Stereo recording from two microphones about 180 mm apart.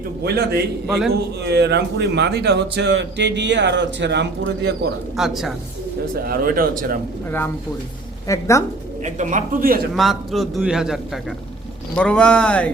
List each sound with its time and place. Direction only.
0.9 s a man's voice: centre (ahead or behind)
1.1 s speech: 65° right (ahead or behind)
5.1 s a man's voice: centre (ahead or behind)
6.2 s a man's voice: 55° right (ahead or behind)
7.3 s speech: 10° left (ahead or behind)
9.0 s a man's voice: 45° right (ahead or behind)
9.9 s a man's voice: centre (ahead or behind)